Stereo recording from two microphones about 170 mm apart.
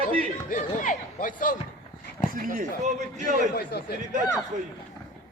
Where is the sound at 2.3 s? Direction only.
50° right (ahead or behind).